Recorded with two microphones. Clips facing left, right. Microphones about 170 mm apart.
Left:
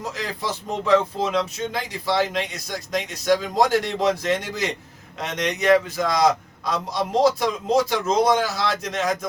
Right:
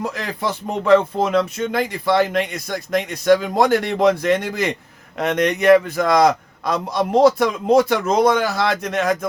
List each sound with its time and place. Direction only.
0.0 s speech: 55° right (ahead or behind)